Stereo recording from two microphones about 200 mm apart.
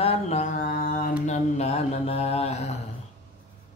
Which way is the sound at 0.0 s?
30° left (ahead or behind).